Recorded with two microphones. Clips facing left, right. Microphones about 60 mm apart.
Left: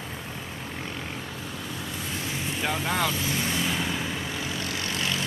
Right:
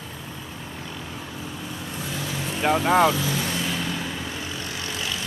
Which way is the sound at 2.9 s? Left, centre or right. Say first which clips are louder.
Right 10 dB; right.